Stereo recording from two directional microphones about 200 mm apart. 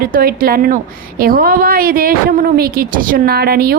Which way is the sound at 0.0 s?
45° right (ahead or behind).